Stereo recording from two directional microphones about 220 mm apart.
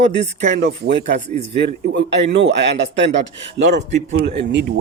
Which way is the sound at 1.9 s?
50° right (ahead or behind).